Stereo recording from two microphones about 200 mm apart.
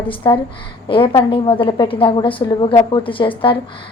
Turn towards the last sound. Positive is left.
turn(degrees=25)  # may be behind; listen again after turning